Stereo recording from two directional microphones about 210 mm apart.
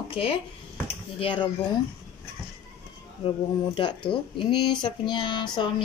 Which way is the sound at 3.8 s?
25° left (ahead or behind).